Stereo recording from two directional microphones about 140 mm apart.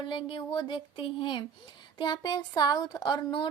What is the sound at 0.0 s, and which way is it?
A woman's voice, 35° left (ahead or behind).